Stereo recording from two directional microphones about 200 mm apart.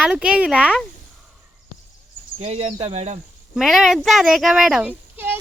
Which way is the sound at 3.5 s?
Centre (ahead or behind).